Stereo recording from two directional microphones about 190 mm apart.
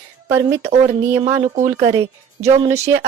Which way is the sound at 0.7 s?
35° right (ahead or behind).